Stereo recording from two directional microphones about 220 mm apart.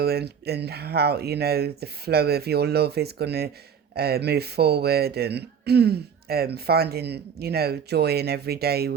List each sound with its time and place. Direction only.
0.0 s speech: 45° right (ahead or behind)